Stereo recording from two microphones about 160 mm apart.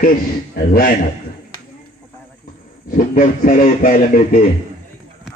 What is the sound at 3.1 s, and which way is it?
A man's voice, 55° left (ahead or behind).